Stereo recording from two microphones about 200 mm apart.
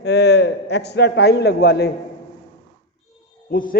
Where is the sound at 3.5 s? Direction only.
45° left (ahead or behind).